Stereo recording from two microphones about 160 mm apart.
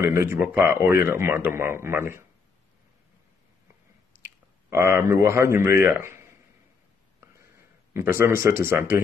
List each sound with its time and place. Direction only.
0.0 s a man's voice: 15° right (ahead or behind)
4.6 s a man's voice: 15° right (ahead or behind)
7.9 s a man's voice: 15° right (ahead or behind)